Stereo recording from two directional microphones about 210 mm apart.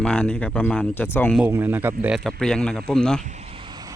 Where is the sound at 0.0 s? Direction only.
5° left (ahead or behind).